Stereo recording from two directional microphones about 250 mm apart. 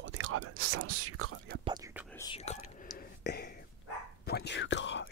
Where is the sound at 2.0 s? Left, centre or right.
Centre.